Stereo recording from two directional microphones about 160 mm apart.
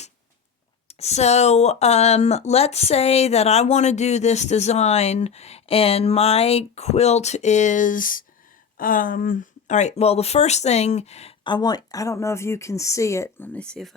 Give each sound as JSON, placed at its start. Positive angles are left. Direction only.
{"t": 0.9, "sound": "speech", "side_deg": 40}
{"t": 11.4, "sound": "speech", "side_deg": 25}